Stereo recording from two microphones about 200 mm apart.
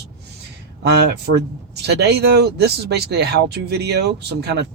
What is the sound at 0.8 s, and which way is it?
Speech, 55° right (ahead or behind).